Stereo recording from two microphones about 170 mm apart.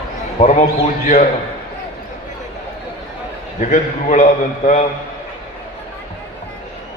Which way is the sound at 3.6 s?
45° left (ahead or behind).